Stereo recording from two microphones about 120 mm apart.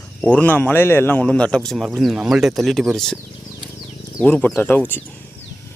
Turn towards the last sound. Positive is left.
turn(degrees=15)  # may be behind; listen again after turning